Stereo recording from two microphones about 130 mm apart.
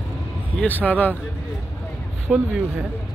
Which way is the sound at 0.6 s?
15° left (ahead or behind).